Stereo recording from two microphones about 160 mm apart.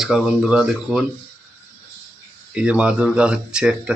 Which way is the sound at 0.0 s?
5° right (ahead or behind).